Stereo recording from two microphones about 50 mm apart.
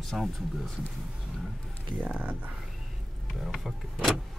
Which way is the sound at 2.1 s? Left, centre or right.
Right.